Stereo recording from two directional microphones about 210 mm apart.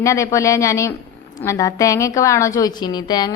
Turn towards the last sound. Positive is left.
turn(degrees=20)  # may be behind; listen again after turning